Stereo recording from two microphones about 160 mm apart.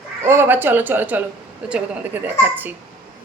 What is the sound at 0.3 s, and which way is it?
A woman's voice, 15° right (ahead or behind).